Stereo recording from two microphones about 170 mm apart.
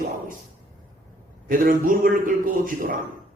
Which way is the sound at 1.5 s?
55° right (ahead or behind).